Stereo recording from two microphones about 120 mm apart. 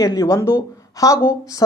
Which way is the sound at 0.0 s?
30° left (ahead or behind).